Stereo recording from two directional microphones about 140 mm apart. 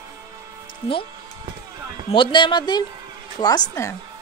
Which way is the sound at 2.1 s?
35° left (ahead or behind).